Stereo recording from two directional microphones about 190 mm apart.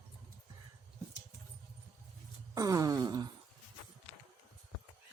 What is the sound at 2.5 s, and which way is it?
Wail, 20° right (ahead or behind).